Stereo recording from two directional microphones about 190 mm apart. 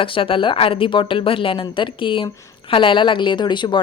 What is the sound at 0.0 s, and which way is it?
Speech, 30° left (ahead or behind).